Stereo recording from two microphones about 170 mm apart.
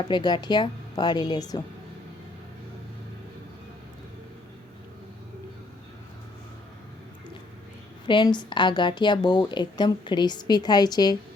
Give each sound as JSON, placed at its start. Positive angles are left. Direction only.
{"t": 0.0, "sound": "speech", "side_deg": 25}
{"t": 8.0, "sound": "speech", "side_deg": 25}